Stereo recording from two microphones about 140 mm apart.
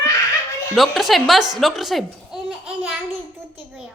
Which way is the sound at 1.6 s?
Centre (ahead or behind).